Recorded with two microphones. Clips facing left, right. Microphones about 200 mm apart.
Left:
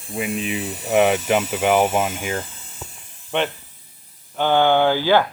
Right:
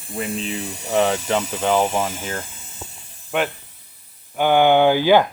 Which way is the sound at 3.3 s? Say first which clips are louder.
Even; 5° right (ahead or behind).